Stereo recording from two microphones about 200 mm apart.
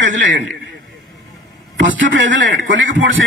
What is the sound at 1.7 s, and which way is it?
A man's voice, 70° right (ahead or behind).